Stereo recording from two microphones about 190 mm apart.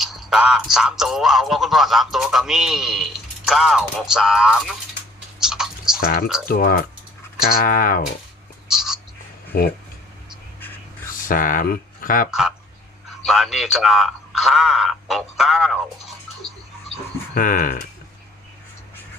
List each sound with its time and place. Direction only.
0.0 s speech: centre (ahead or behind)
5.4 s a sound: 5° right (ahead or behind)
6.5 s speech: 50° left (ahead or behind)
8.6 s a sound: 5° right (ahead or behind)
9.5 s speech: 50° left (ahead or behind)
11.1 s speech: 45° left (ahead or behind)
12.3 s speech: 5° right (ahead or behind)
17.3 s speech: 45° left (ahead or behind)